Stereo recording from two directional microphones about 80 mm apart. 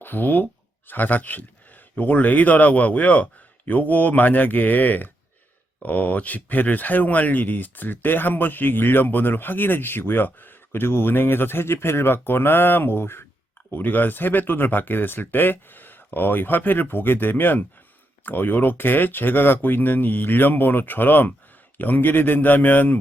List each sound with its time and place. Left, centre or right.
0.0 s speech: left